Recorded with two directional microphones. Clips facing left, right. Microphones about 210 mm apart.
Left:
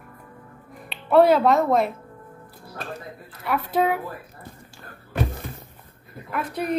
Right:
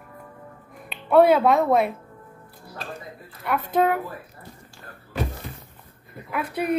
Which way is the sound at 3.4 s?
5° left (ahead or behind).